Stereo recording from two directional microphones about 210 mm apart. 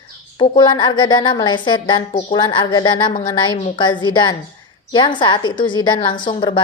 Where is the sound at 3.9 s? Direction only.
20° left (ahead or behind).